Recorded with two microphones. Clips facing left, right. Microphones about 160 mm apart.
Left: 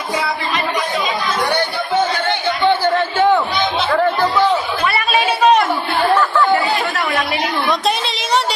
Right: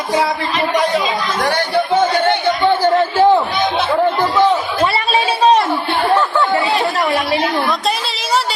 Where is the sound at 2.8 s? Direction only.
35° right (ahead or behind).